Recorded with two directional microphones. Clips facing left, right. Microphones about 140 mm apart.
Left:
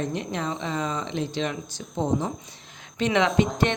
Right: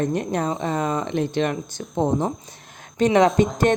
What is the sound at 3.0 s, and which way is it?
Speech, 40° right (ahead or behind).